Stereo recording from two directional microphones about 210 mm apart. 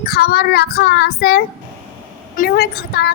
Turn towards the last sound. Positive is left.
turn(degrees=50)  # may be behind; listen again after turning